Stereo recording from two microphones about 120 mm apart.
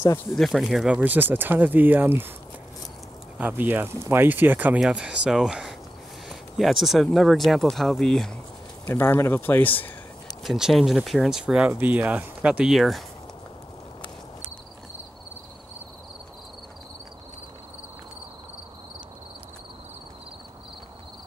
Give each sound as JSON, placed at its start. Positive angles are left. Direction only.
{"t": 0.4, "sound": "speech", "side_deg": 0}
{"t": 3.3, "sound": "speech", "side_deg": -15}
{"t": 8.8, "sound": "speech", "side_deg": 20}
{"t": 10.4, "sound": "speech", "side_deg": 0}